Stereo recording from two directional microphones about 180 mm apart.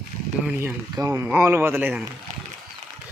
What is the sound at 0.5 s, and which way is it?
Speech, 15° right (ahead or behind).